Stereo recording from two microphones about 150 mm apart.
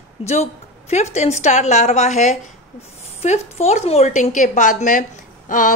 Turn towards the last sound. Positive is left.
turn(degrees=65)  # may be behind; listen again after turning